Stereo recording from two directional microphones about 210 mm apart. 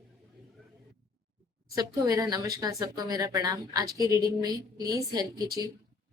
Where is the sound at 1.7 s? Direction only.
15° right (ahead or behind).